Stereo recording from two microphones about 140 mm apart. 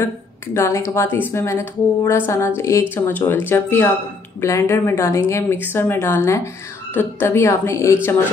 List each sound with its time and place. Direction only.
0.6 s a woman's voice: 20° left (ahead or behind)